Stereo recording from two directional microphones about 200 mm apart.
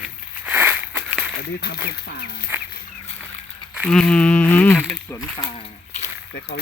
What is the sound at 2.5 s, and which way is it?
Chicken, 10° right (ahead or behind).